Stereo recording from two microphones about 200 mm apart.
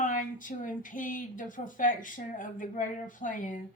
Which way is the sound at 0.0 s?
40° left (ahead or behind).